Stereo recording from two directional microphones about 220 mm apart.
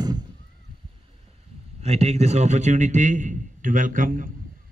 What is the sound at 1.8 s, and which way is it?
A man's voice, 30° right (ahead or behind).